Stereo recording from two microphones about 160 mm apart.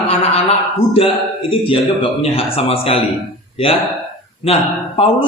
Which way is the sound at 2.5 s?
40° left (ahead or behind).